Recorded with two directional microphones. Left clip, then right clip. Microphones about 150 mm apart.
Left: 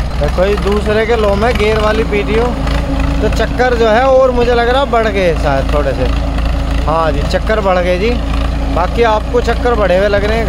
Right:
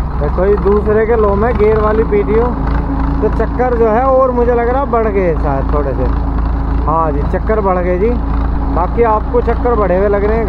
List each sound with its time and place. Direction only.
0.4 s speech: 35° left (ahead or behind)
6.9 s speech: 40° left (ahead or behind)